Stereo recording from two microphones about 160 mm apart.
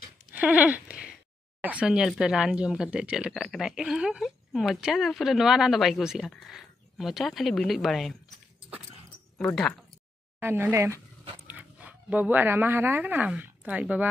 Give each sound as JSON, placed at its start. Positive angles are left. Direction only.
{"t": 0.3, "sound": "goat", "side_deg": -10}
{"t": 1.6, "sound": "speech", "side_deg": -10}
{"t": 9.4, "sound": "speech", "side_deg": 5}
{"t": 10.4, "sound": "speech", "side_deg": -15}